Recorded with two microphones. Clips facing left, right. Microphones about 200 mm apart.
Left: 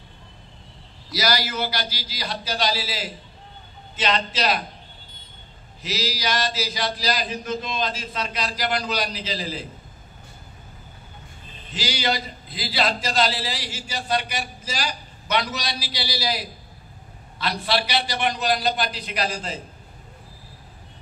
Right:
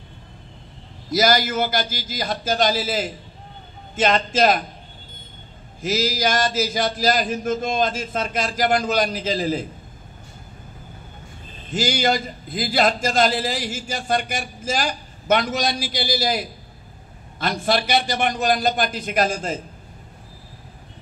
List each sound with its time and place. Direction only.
1.1 s a man's voice: 50° right (ahead or behind)
5.8 s a man's voice: 50° right (ahead or behind)
11.7 s a man's voice: 50° right (ahead or behind)